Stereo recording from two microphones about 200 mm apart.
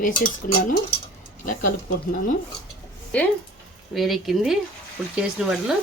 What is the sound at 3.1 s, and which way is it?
Speech, 5° left (ahead or behind).